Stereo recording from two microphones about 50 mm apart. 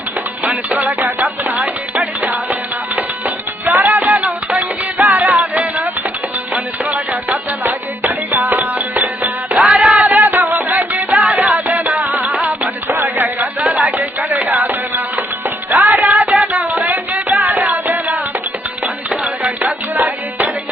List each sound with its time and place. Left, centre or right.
0.4 s music: right
0.9 s music: right
9.6 s music: centre
10.1 s music: right
12.9 s music: right
13.6 s music: right
13.9 s music: right
19.2 s music: right